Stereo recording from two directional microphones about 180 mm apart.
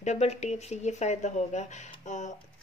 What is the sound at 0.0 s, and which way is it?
Speech, 40° left (ahead or behind).